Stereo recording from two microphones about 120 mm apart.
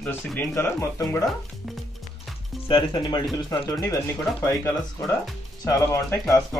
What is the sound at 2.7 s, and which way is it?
Speech, 40° left (ahead or behind).